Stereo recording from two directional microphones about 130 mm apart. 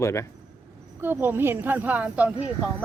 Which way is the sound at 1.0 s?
15° right (ahead or behind).